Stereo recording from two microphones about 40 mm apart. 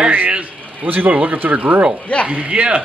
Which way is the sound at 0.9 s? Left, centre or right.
Right.